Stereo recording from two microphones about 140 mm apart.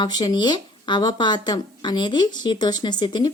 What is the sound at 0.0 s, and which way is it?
Speech, 30° left (ahead or behind).